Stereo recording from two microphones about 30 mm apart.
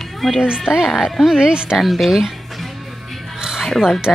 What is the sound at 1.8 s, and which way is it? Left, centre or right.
Speech, centre.